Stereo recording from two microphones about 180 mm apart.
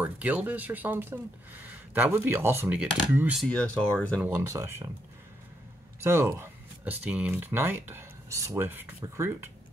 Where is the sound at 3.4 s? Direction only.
5° left (ahead or behind).